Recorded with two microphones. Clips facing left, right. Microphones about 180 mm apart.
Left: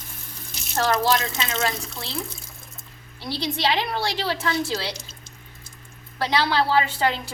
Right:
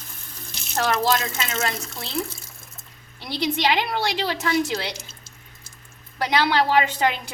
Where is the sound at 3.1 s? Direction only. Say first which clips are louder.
Right 3 dB; 20° right (ahead or behind).